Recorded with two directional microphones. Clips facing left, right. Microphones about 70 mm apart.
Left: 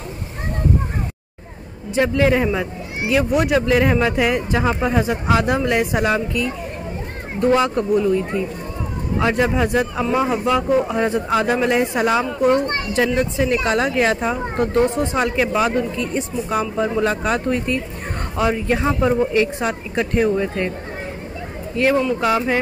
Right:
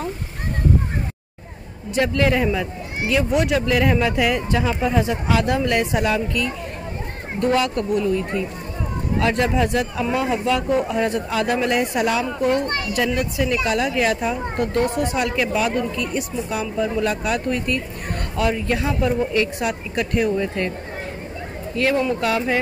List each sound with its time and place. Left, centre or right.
2.0 s speech: left
21.7 s speech: left